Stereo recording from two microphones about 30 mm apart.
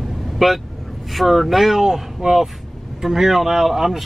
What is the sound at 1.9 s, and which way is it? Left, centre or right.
Speech, right.